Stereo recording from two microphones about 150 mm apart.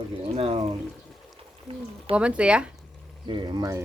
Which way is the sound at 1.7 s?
40° right (ahead or behind).